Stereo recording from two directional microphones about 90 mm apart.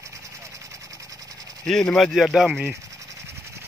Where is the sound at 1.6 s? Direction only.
10° left (ahead or behind).